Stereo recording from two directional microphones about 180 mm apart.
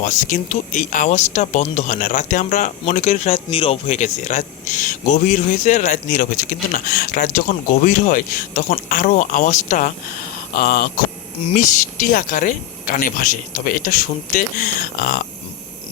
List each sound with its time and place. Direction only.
0.0 s speech: 45° left (ahead or behind)